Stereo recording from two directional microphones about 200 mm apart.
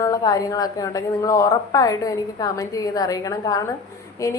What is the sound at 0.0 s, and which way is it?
A woman's voice, 20° left (ahead or behind).